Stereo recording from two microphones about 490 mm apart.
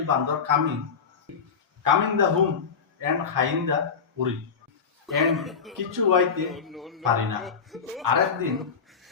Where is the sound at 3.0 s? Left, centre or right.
Right.